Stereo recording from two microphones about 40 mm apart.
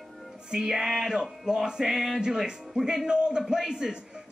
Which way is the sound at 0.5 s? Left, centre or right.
Centre.